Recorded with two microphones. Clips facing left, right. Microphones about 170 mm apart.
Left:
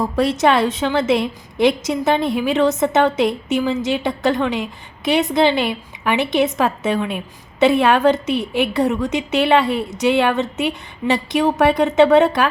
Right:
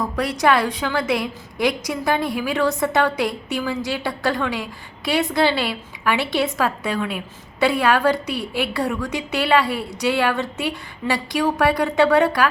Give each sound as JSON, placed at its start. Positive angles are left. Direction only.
{"t": 0.0, "sound": "a woman's voice", "side_deg": 25}